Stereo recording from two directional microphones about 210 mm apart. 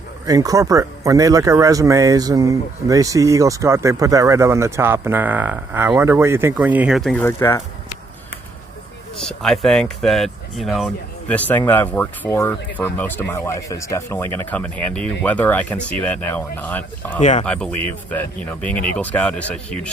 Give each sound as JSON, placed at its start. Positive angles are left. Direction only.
{"t": 0.3, "sound": "speech", "side_deg": -15}
{"t": 9.1, "sound": "speech", "side_deg": 0}
{"t": 17.2, "sound": "speech", "side_deg": 35}
{"t": 17.4, "sound": "speech", "side_deg": 5}